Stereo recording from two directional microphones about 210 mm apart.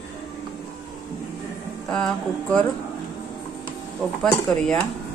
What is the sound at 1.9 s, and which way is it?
Speech, 5° left (ahead or behind).